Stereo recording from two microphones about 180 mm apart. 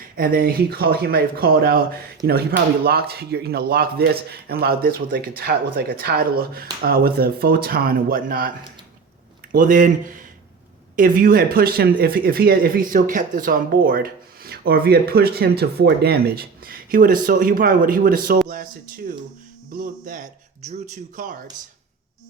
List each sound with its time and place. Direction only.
0.2 s speech: 55° right (ahead or behind)